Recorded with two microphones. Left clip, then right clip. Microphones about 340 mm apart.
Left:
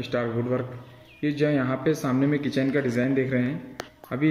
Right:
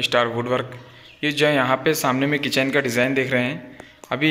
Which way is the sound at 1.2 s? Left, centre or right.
Right.